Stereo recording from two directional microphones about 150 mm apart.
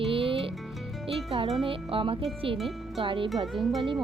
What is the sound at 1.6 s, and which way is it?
Speech, 35° right (ahead or behind).